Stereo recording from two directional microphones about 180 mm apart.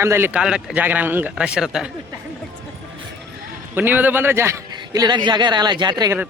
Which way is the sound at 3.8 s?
10° right (ahead or behind).